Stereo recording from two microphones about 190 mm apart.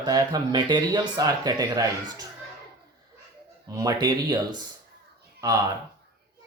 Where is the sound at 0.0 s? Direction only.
20° right (ahead or behind).